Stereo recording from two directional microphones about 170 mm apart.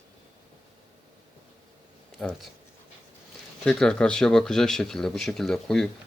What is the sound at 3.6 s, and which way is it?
Speech, 5° left (ahead or behind).